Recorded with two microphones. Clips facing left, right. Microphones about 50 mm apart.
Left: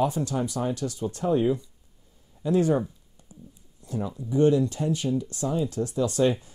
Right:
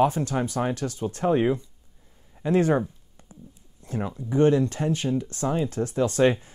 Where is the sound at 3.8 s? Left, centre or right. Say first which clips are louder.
Right 1 dB; right.